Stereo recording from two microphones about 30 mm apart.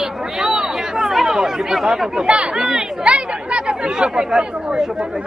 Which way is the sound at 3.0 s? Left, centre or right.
Right.